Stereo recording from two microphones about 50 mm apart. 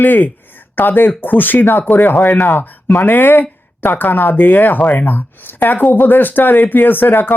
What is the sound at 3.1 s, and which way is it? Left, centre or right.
Speech, left.